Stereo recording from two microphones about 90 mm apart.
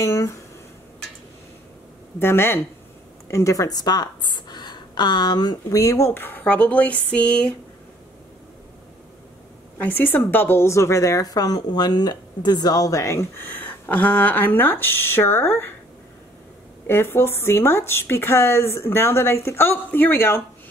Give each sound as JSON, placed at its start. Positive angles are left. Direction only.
{"t": 0.0, "sound": "a woman's voice", "side_deg": 35}
{"t": 2.1, "sound": "a woman's voice", "side_deg": 25}
{"t": 9.8, "sound": "a woman's voice", "side_deg": 20}
{"t": 13.5, "sound": "speech", "side_deg": 20}
{"t": 16.8, "sound": "speech", "side_deg": 25}